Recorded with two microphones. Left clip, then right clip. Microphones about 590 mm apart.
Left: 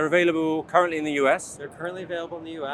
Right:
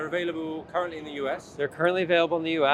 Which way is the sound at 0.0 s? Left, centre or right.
Left.